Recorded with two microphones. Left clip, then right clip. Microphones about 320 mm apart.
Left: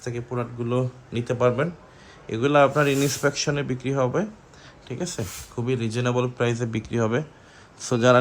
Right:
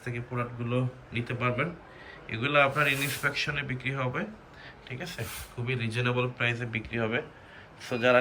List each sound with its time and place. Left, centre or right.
0.0 s speech: centre